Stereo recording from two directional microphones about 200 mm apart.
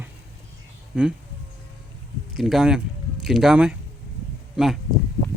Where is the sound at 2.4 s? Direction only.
Centre (ahead or behind).